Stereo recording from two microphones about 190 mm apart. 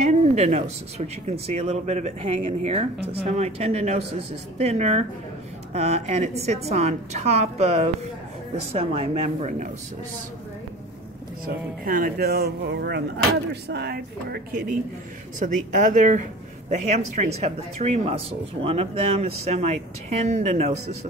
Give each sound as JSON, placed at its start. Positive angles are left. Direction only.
{"t": 0.0, "sound": "speech", "side_deg": -35}
{"t": 11.4, "sound": "speech", "side_deg": -50}
{"t": 15.3, "sound": "speech", "side_deg": -45}